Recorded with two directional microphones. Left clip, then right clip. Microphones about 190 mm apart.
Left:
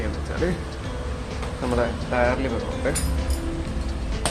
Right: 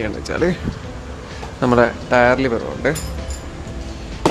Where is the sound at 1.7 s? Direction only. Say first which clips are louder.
Right 9 dB; 70° right (ahead or behind).